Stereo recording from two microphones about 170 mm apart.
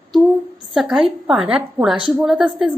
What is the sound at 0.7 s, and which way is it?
Speech, centre (ahead or behind).